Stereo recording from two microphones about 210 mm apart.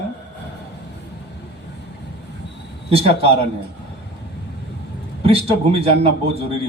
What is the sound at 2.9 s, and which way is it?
Speech, 25° right (ahead or behind).